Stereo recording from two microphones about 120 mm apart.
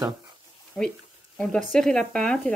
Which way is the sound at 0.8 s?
10° left (ahead or behind).